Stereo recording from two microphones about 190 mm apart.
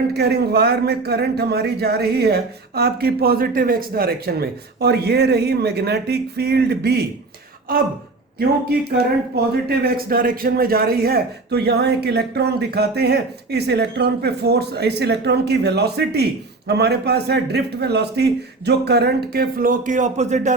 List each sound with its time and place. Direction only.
0.1 s speech: 60° right (ahead or behind)
9.0 s speech: 55° right (ahead or behind); by 20.5 s 35° right (ahead or behind)